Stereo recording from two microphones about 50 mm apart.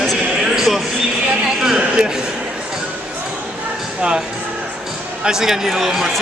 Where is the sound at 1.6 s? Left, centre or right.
Centre.